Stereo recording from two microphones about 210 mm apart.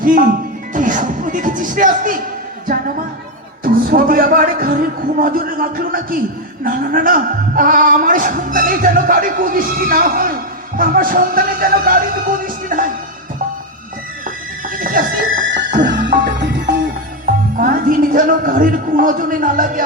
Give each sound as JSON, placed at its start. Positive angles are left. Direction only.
{"t": 0.0, "sound": "speech", "side_deg": -40}
{"t": 3.6, "sound": "speech", "side_deg": -45}
{"t": 6.7, "sound": "music", "side_deg": -40}
{"t": 10.8, "sound": "speech", "side_deg": -40}
{"t": 14.8, "sound": "a sound", "side_deg": -40}
{"t": 15.9, "sound": "music", "side_deg": -40}
{"t": 16.2, "sound": "music", "side_deg": -55}
{"t": 17.3, "sound": "music", "side_deg": -40}